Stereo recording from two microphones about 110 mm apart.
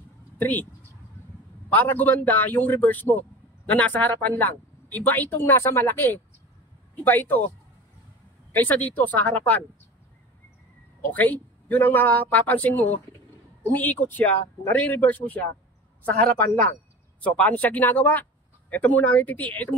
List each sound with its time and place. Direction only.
0.4 s speech: 15° left (ahead or behind)
1.7 s speech: 15° left (ahead or behind)
8.5 s speech: 15° left (ahead or behind)
11.1 s speech: 15° left (ahead or behind)